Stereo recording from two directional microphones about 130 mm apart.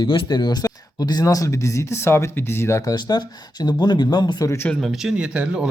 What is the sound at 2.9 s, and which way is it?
Speech, 30° left (ahead or behind).